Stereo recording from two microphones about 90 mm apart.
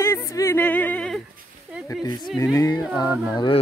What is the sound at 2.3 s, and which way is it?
Male singing, 40° left (ahead or behind).